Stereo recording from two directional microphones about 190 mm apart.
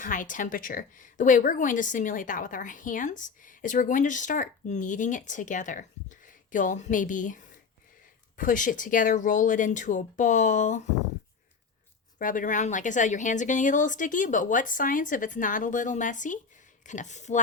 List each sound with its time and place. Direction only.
0.0 s speech: 45° left (ahead or behind)
12.2 s speech: 45° left (ahead or behind)